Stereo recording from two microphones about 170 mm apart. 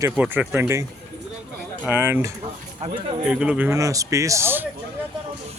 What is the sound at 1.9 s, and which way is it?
Speech, 10° right (ahead or behind).